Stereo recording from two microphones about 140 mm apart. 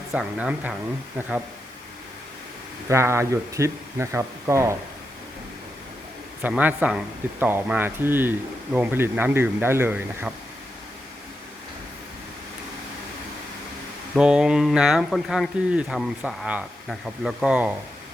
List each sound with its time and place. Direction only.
0.1 s speech: 5° right (ahead or behind)
2.9 s speech: 20° right (ahead or behind)
6.4 s speech: 10° right (ahead or behind)
14.2 s speech: 5° right (ahead or behind)